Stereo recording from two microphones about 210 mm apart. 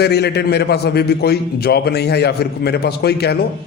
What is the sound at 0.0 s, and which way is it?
A man's voice, 50° left (ahead or behind).